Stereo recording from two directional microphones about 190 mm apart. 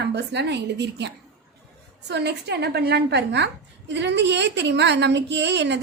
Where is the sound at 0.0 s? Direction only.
60° right (ahead or behind).